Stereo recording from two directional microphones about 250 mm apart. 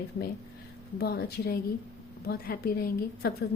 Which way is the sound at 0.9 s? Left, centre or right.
Left.